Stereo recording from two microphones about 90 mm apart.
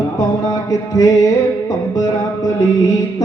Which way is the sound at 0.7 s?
45° left (ahead or behind).